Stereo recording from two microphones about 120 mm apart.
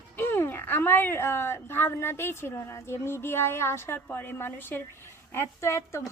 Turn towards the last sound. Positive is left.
turn(degrees=25)  # may be behind; listen again after turning